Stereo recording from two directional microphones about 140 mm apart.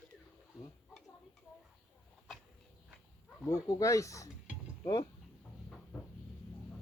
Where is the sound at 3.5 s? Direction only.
25° left (ahead or behind).